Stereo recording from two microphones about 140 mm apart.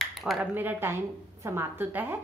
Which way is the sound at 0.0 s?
Centre (ahead or behind).